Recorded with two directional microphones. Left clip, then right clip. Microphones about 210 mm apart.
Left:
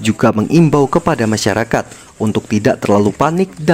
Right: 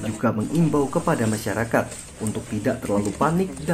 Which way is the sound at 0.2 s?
45° left (ahead or behind).